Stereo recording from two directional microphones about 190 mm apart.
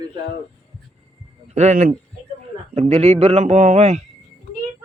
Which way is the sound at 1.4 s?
35° right (ahead or behind).